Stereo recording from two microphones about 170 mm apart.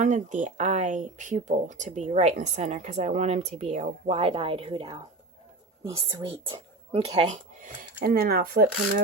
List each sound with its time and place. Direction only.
0.0 s speech: 45° right (ahead or behind); by 4.9 s 30° right (ahead or behind)
6.1 s speech: 25° right (ahead or behind)
7.2 s speech: 45° right (ahead or behind)
8.0 s speech: 65° right (ahead or behind)